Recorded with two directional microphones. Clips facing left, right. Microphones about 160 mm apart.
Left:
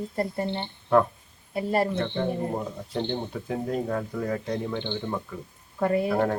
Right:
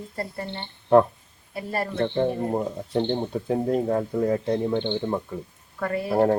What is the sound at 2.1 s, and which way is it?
Speech, 30° right (ahead or behind).